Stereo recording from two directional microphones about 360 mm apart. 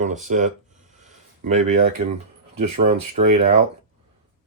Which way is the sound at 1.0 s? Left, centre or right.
Centre.